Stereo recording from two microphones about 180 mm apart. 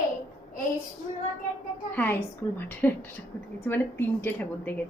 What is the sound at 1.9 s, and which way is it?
Speech, 10° left (ahead or behind).